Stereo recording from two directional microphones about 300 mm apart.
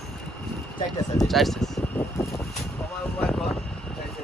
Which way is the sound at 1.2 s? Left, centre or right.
Centre.